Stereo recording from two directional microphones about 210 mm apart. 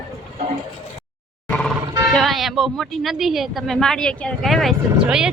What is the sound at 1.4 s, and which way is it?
Music, 5° left (ahead or behind).